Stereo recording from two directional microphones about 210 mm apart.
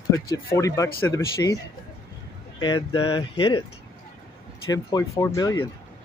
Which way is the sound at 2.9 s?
25° left (ahead or behind).